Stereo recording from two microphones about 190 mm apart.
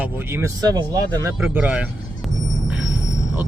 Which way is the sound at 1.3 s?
5° right (ahead or behind).